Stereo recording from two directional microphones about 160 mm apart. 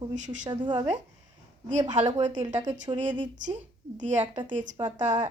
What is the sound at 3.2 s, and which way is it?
A woman's voice, 50° right (ahead or behind).